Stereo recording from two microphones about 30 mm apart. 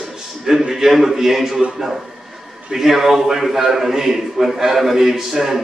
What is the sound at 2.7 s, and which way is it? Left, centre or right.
A man's voice, centre.